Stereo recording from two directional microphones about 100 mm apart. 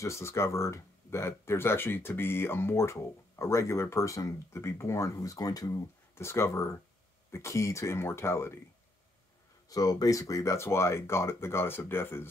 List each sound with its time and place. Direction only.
0.0 s speech: 25° left (ahead or behind)
9.7 s speech: 40° left (ahead or behind); by 12.3 s 25° left (ahead or behind)